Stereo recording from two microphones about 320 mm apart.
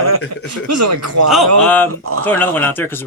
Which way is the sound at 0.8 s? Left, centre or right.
Right.